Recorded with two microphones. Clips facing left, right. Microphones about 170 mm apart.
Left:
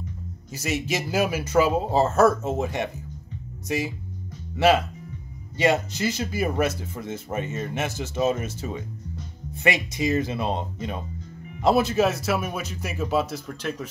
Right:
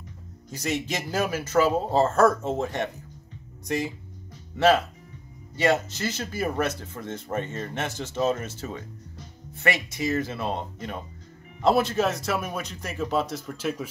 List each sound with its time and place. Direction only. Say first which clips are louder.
0.5 s speech: left 1 dB; 5° left (ahead or behind)
5.6 s speech: left 1 dB; 15° left (ahead or behind); by 13.8 s 5° right (ahead or behind)